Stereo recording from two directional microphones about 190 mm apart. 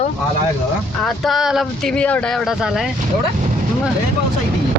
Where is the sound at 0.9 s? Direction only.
Centre (ahead or behind).